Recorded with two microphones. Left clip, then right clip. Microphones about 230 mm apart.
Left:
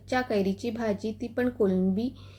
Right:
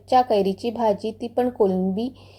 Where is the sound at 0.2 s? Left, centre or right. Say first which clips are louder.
Right 8 dB; centre.